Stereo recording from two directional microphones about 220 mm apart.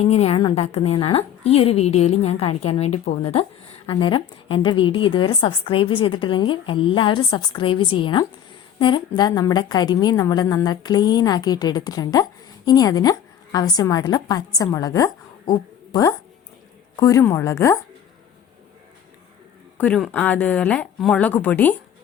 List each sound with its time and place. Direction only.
0.0 s a woman's voice: 25° left (ahead or behind)
19.8 s speech: 5° left (ahead or behind)